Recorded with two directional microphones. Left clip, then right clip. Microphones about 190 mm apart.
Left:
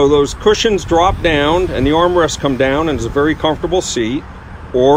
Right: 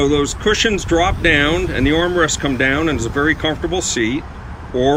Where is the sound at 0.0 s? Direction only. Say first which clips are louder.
Left 5 dB; 15° left (ahead or behind).